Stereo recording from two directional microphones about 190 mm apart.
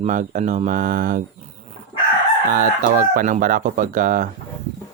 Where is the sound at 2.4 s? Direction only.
45° right (ahead or behind).